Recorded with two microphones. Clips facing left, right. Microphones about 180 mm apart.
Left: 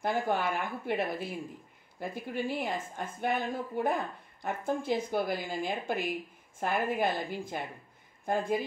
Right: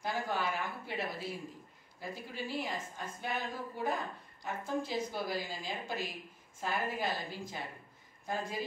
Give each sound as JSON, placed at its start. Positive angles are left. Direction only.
{"t": 0.0, "sound": "speech", "side_deg": 55}